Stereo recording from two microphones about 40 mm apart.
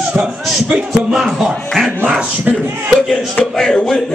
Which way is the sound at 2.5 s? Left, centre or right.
Right.